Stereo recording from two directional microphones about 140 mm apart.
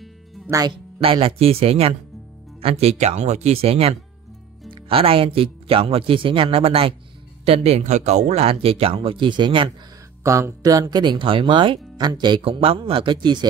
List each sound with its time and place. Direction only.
0.5 s speech: 25° right (ahead or behind)
1.0 s speech: 40° right (ahead or behind)
10.2 s speech: 20° right (ahead or behind)